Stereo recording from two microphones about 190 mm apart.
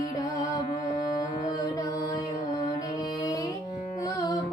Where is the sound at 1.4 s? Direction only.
20° left (ahead or behind).